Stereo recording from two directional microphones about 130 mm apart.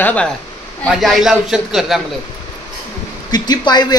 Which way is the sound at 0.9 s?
Centre (ahead or behind).